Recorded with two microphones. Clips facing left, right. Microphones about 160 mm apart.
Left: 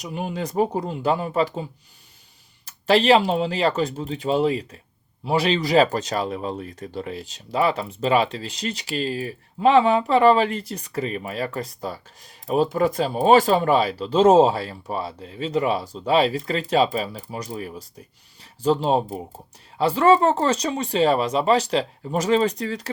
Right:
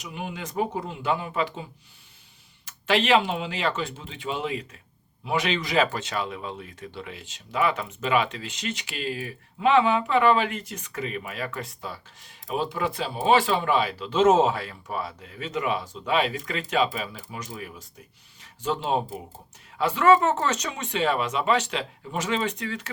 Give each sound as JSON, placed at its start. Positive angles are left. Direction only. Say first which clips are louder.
{"t": 0.0, "sound": "speech", "louder": "left 6 dB", "side_deg": 40}
{"t": 2.6, "sound": "speech", "louder": "left 6 dB", "side_deg": 35}